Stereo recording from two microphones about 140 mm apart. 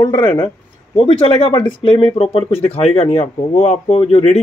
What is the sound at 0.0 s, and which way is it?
Speech, 30° left (ahead or behind).